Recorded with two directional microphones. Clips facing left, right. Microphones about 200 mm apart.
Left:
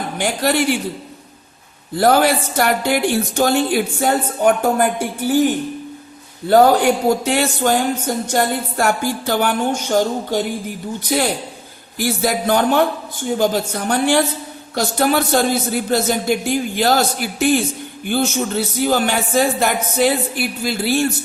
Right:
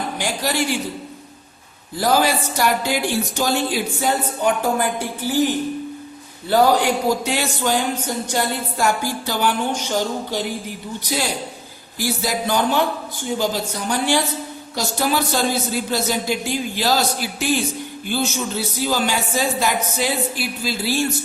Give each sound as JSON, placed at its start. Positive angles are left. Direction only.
{"t": 0.2, "sound": "a man's voice", "side_deg": 60}
{"t": 2.0, "sound": "a man's voice", "side_deg": 60}
{"t": 6.5, "sound": "speech", "side_deg": 50}
{"t": 11.9, "sound": "a man's voice", "side_deg": 55}